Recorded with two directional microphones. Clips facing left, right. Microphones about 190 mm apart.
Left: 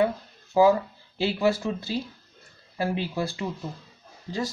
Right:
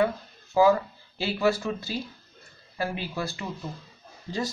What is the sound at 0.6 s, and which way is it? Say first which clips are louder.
Speech: left 1 dB; 20° left (ahead or behind).